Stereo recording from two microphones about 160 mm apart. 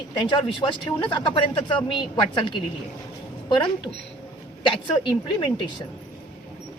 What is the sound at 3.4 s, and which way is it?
Speech, 30° left (ahead or behind).